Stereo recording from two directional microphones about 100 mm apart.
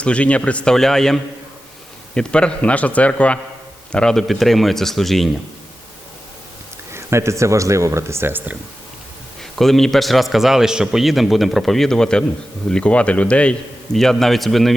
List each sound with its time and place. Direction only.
0.0 s a man's voice: 10° left (ahead or behind)
6.9 s speech: 25° right (ahead or behind)
9.4 s a man's voice: 5° left (ahead or behind)